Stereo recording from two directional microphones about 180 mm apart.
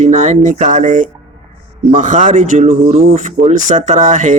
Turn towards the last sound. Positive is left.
turn(degrees=-45)  # may be behind; listen again after turning